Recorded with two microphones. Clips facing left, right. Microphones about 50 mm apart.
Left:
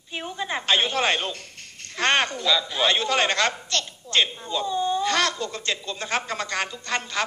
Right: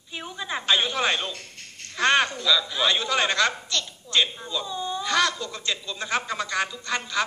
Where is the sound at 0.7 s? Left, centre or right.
Left.